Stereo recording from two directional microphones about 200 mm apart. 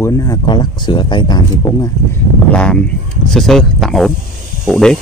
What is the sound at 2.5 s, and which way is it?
A man's voice, 5° left (ahead or behind).